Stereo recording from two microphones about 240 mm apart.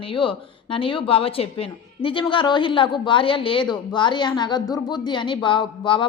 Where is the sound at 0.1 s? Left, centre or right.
Left.